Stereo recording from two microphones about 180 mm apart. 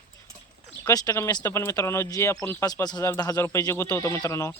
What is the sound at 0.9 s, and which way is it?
Speech, 20° left (ahead or behind).